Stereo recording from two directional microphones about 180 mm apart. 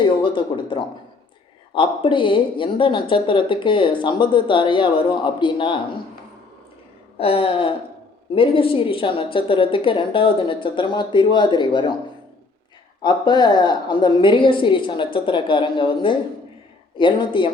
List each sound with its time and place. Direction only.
0.0 s speech: 25° left (ahead or behind)
7.2 s a sound: 30° left (ahead or behind)
8.4 s speech: 30° left (ahead or behind)
13.0 s speech: 25° left (ahead or behind)